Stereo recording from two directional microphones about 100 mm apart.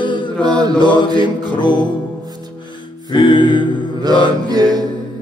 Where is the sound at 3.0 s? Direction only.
55° left (ahead or behind).